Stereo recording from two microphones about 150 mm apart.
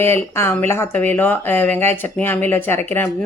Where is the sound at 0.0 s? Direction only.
15° left (ahead or behind).